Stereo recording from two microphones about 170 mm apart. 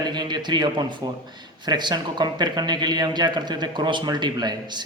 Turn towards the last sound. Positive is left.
turn(degrees=-25)  # may be behind; listen again after turning